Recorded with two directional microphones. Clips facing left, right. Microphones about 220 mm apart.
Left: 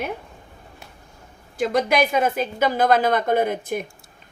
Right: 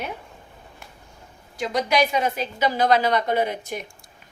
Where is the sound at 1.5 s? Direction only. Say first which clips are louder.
Left 2 dB; 50° left (ahead or behind).